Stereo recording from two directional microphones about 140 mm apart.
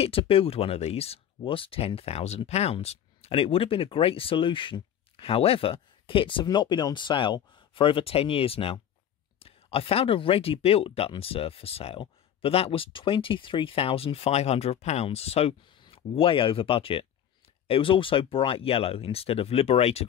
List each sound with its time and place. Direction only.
0.0 s speech: 40° left (ahead or behind)